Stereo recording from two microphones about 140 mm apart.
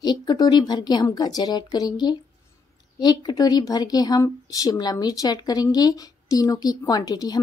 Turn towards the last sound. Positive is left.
turn(degrees=25)  # may be behind; listen again after turning